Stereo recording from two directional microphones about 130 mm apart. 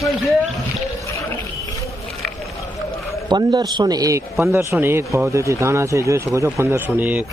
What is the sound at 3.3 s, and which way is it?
A man's voice, 30° right (ahead or behind).